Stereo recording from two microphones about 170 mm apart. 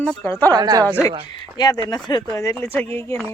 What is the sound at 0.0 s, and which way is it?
Speech, 5° left (ahead or behind).